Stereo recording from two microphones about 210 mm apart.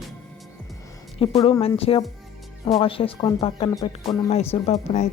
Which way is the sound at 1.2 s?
25° left (ahead or behind).